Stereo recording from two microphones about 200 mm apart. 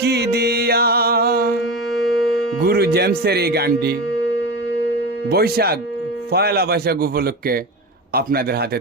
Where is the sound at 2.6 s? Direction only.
50° right (ahead or behind).